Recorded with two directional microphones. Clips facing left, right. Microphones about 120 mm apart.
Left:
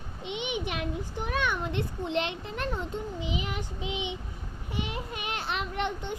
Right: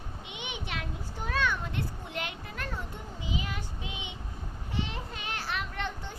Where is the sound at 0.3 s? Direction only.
20° left (ahead or behind).